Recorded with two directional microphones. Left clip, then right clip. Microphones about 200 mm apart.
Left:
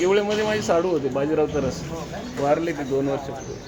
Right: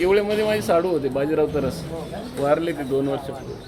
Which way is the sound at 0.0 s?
5° right (ahead or behind).